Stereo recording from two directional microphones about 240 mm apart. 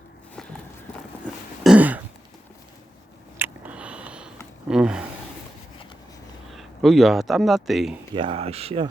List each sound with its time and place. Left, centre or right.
1.6 s throat clearing: centre
3.3 s a sound: centre
4.7 s rub: centre
6.5 s speech: centre
8.1 s speech: right